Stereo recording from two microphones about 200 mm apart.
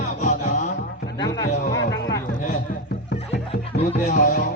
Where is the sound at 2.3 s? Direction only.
40° left (ahead or behind).